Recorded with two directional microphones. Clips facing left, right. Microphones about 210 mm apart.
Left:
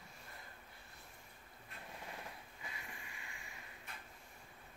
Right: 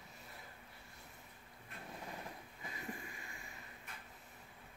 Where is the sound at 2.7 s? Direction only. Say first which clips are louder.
Right 7 dB; 40° right (ahead or behind).